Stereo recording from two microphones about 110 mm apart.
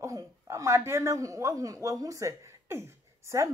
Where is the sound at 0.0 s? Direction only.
30° right (ahead or behind).